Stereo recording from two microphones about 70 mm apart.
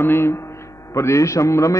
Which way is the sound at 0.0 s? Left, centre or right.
Left.